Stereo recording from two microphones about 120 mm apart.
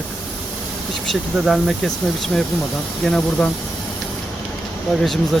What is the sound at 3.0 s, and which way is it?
Speech, 5° left (ahead or behind).